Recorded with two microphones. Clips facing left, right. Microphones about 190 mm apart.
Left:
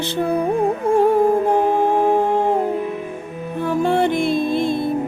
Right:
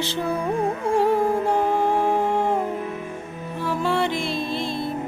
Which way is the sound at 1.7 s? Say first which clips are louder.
Left 4 dB; 20° left (ahead or behind).